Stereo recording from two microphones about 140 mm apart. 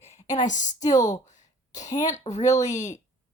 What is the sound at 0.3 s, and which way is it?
Speech, 60° left (ahead or behind).